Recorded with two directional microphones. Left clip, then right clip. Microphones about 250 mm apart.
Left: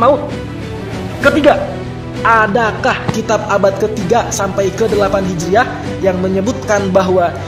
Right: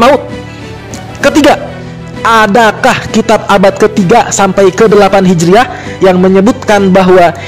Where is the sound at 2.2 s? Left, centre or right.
Right.